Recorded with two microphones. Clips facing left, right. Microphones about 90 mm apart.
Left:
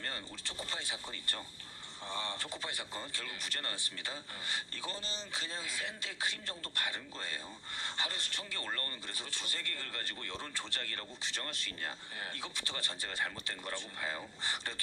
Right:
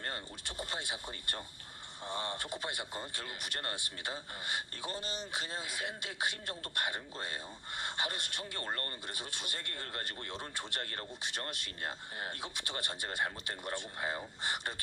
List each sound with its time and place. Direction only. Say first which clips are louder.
0.0 s speech: right 1 dB; 15° right (ahead or behind)
9.0 s speech: right 1 dB; 15° right (ahead or behind)